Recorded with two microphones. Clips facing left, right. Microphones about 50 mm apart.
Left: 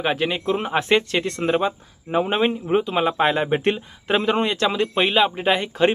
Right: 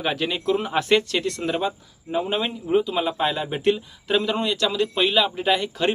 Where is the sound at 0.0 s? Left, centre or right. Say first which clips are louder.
Left 2 dB; left.